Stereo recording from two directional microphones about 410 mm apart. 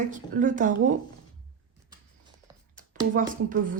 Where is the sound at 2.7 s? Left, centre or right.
Centre.